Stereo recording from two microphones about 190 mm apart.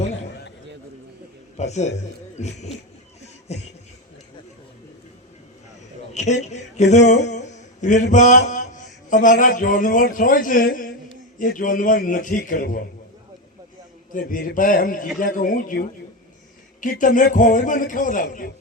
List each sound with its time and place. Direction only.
1.5 s speech: 35° left (ahead or behind)
6.4 s a sound: 35° left (ahead or behind)
9.4 s a man's voice: 45° left (ahead or behind)
14.1 s a man's voice: 45° left (ahead or behind)
16.8 s a man's voice: 45° left (ahead or behind)